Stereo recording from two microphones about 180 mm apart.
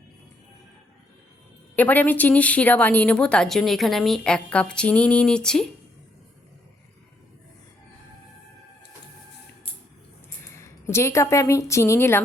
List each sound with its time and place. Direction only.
1.7 s a woman's voice: 10° left (ahead or behind)
10.4 s speech: 15° left (ahead or behind)